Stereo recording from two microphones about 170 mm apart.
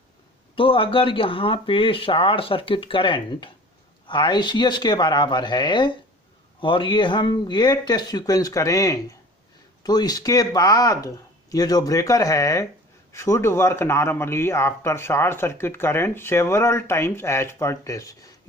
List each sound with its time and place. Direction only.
0.5 s a man's voice: 30° left (ahead or behind)